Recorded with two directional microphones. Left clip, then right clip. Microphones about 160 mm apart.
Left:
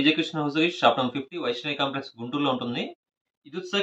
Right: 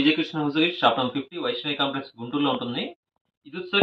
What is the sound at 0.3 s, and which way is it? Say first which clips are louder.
Speech: right 1 dB; 10° left (ahead or behind).